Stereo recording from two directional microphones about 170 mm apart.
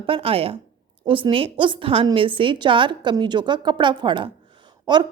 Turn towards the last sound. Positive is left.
turn(degrees=-25)  # may be behind; listen again after turning